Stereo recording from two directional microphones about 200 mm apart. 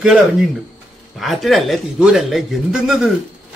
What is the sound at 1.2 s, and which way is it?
A man's voice, centre (ahead or behind).